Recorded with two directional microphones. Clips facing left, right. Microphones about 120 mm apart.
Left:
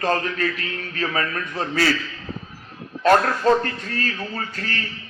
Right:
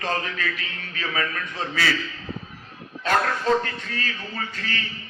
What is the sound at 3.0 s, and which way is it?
A man's voice, 40° left (ahead or behind).